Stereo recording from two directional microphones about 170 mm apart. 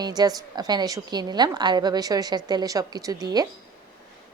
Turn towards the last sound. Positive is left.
turn(degrees=-20)  # may be behind; listen again after turning